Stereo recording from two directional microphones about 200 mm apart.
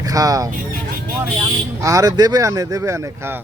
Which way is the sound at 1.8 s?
15° right (ahead or behind).